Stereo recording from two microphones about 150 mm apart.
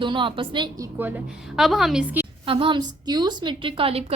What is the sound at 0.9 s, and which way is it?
Speech, 10° right (ahead or behind).